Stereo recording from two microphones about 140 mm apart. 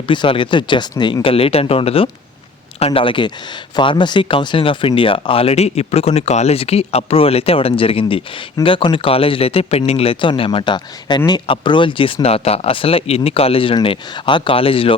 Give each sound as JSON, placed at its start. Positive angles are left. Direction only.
{"t": 0.1, "sound": "speech", "side_deg": 35}